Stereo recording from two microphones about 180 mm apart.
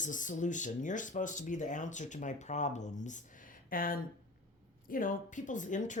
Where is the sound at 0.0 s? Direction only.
45° left (ahead or behind).